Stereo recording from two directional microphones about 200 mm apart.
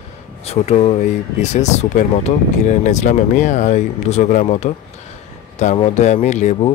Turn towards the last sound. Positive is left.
turn(degrees=35)  # may be behind; listen again after turning